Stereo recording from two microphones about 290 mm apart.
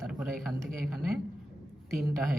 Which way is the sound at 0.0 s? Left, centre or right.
Centre.